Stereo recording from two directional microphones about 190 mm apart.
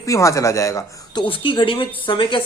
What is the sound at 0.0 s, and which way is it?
Speech, 15° left (ahead or behind).